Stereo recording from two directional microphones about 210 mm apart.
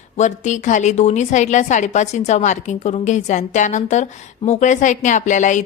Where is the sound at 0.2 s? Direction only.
35° left (ahead or behind).